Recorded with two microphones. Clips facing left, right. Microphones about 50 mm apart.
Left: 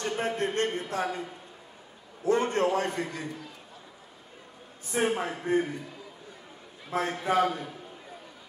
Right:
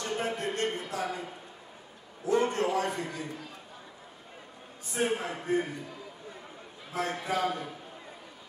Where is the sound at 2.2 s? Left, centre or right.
Left.